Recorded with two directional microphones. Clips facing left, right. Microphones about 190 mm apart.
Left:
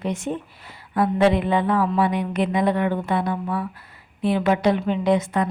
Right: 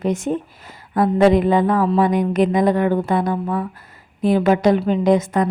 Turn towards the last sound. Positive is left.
turn(degrees=-45)  # may be behind; listen again after turning